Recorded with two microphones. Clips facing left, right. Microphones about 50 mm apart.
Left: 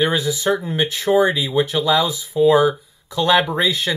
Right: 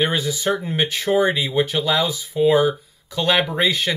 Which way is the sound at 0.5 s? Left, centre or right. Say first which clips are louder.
Left 2 dB; right.